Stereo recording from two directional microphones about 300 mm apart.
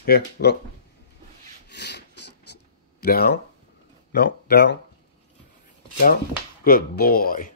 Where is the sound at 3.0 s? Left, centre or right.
Left.